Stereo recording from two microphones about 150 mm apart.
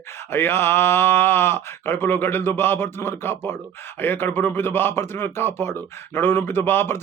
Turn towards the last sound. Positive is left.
turn(degrees=15)  # may be behind; listen again after turning